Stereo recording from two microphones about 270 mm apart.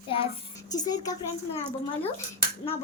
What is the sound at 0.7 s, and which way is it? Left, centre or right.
Speech, centre.